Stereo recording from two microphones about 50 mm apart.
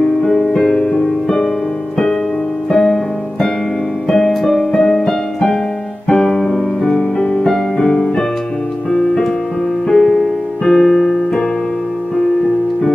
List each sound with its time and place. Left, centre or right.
0.0 s music: centre
2.7 s music: centre
7.2 s music: centre
9.8 s piano: centre